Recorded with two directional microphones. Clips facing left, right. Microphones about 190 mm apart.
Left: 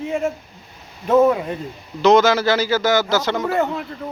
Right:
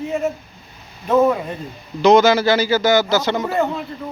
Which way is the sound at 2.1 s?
10° right (ahead or behind).